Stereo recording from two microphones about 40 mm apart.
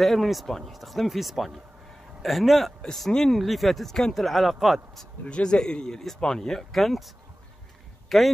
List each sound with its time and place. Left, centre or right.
0.0 s speech: centre
3.1 s speech: centre
3.3 s speech: centre
5.2 s speech: left
6.7 s speech: centre
8.1 s speech: centre